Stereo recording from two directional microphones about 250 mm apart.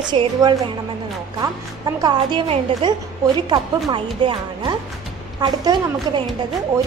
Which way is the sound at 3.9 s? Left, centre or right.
Centre.